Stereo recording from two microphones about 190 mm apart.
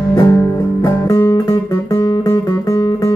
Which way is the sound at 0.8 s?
15° left (ahead or behind).